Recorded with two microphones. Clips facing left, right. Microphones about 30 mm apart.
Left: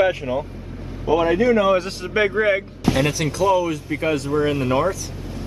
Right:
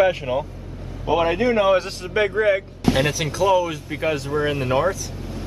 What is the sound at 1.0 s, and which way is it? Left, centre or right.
Speech, right.